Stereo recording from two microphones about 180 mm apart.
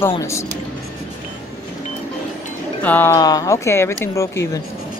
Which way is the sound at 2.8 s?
10° left (ahead or behind).